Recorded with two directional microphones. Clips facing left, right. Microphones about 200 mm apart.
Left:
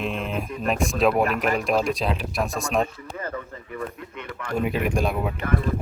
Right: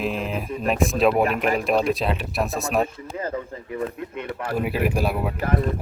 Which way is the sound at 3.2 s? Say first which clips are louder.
Right 4 dB; 25° right (ahead or behind).